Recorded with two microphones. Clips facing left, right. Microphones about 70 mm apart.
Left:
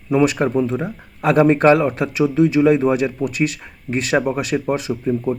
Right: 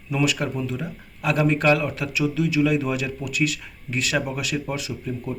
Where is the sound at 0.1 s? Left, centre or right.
Left.